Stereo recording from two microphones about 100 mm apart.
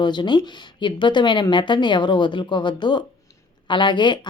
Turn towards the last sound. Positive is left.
turn(degrees=50)  # may be behind; listen again after turning